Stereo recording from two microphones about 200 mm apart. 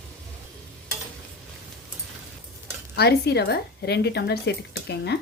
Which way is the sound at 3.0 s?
55° left (ahead or behind).